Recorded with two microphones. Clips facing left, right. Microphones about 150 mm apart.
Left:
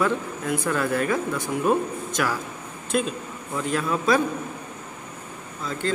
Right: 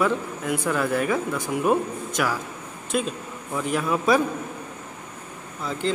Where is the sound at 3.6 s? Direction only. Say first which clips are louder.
Right 1 dB; 10° right (ahead or behind).